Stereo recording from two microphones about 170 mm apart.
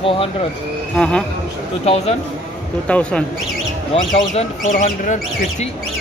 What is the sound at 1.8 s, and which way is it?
Speech, 35° left (ahead or behind).